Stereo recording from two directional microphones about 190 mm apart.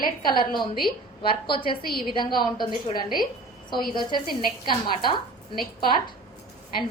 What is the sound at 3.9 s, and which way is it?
A woman's voice, 25° left (ahead or behind).